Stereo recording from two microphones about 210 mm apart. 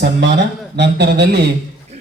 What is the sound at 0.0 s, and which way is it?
Speech, 55° right (ahead or behind).